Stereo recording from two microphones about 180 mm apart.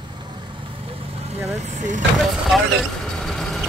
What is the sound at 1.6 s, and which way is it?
Speech, 40° right (ahead or behind).